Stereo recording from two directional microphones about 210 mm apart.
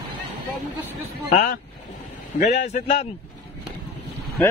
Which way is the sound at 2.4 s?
35° left (ahead or behind).